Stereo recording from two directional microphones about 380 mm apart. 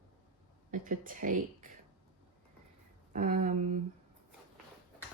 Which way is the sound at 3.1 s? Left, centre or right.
Centre.